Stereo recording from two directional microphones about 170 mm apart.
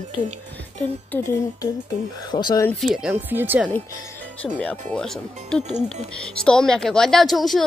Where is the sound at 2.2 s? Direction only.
25° left (ahead or behind).